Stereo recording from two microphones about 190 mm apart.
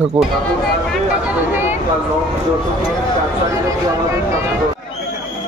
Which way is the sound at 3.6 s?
15° right (ahead or behind).